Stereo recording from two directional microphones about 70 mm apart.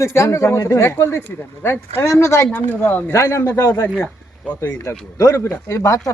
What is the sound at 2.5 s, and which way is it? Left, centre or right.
Speech, left.